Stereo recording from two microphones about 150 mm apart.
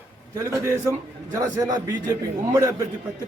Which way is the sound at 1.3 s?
25° right (ahead or behind).